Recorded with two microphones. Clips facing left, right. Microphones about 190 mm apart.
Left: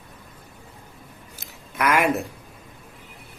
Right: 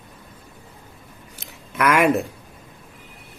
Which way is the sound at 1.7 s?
55° right (ahead or behind).